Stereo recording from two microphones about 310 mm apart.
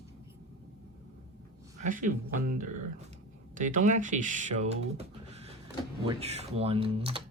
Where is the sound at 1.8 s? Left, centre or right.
Right.